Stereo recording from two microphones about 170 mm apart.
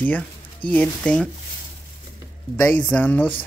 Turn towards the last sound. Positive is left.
turn(degrees=10)  # may be behind; listen again after turning